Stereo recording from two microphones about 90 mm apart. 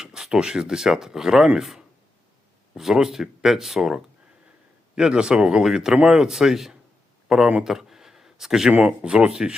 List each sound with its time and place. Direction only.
0.0 s speech: 5° right (ahead or behind)